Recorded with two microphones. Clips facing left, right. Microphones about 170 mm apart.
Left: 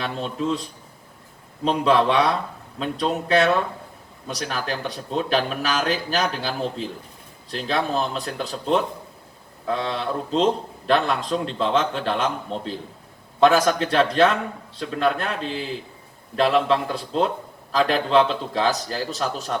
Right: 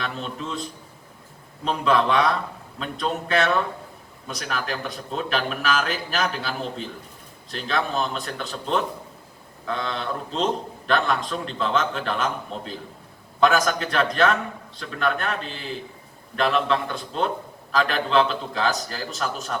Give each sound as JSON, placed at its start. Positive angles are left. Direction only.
{"t": 0.0, "sound": "a man's voice", "side_deg": 35}
{"t": 1.6, "sound": "a man's voice", "side_deg": 30}